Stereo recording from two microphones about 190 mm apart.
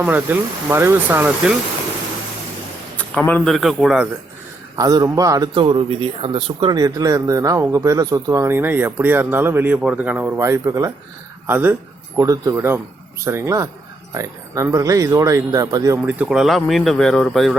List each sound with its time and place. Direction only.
0.0 s speech: 10° right (ahead or behind)
3.0 s speech: 10° left (ahead or behind)
4.8 s a man's voice: 20° right (ahead or behind); by 17.5 s centre (ahead or behind)